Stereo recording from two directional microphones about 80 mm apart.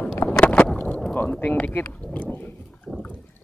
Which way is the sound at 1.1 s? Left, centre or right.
Left.